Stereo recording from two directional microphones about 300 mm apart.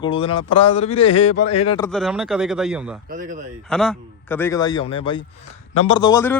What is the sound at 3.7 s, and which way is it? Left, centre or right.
A man's voice, centre.